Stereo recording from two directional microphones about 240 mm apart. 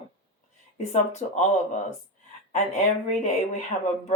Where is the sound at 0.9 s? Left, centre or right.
Left.